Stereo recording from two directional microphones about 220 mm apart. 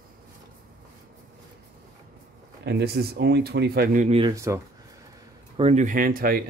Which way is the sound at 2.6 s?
50° right (ahead or behind).